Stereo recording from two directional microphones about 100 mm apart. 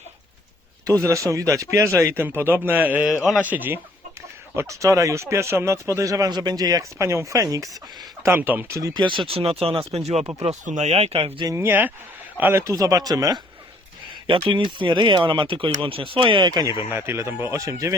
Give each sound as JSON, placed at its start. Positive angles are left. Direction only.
{"t": 0.9, "sound": "speech", "side_deg": -35}
{"t": 4.5, "sound": "speech", "side_deg": -30}
{"t": 8.2, "sound": "speech", "side_deg": -20}
{"t": 8.8, "sound": "speech", "side_deg": -45}
{"t": 11.5, "sound": "speech", "side_deg": -20}
{"t": 14.4, "sound": "speech", "side_deg": -55}
{"t": 16.9, "sound": "speech", "side_deg": -25}